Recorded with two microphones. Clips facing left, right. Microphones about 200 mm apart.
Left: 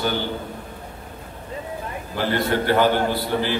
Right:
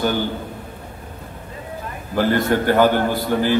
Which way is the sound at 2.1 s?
45° right (ahead or behind).